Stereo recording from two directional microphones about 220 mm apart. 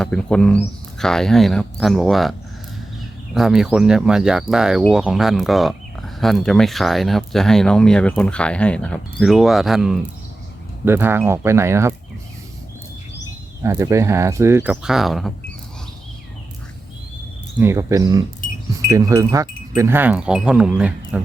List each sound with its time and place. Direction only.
0.0 s speech: 5° left (ahead or behind)
3.3 s speech: centre (ahead or behind)
10.8 s wind chime: 10° right (ahead or behind)
13.6 s wind chime: 15° right (ahead or behind)
17.6 s wind chime: 10° right (ahead or behind)